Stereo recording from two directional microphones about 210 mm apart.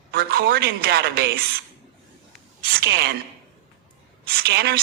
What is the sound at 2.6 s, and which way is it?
Speech, 50° right (ahead or behind).